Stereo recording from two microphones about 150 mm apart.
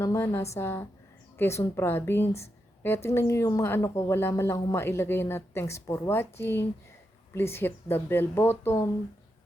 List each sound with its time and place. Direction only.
0.0 s a woman's voice: 20° left (ahead or behind)